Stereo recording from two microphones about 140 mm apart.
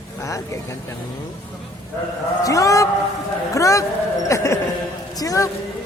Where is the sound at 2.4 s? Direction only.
25° left (ahead or behind).